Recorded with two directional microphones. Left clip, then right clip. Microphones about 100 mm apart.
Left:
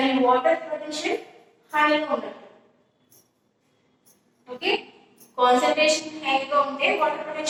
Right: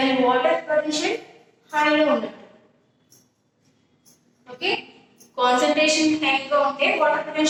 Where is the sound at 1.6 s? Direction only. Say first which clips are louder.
Right 2 dB; 30° right (ahead or behind).